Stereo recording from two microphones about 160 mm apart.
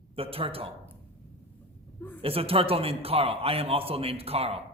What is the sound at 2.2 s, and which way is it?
A man's voice, 35° right (ahead or behind).